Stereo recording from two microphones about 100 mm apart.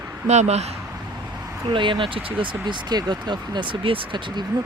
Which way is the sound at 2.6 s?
45° right (ahead or behind).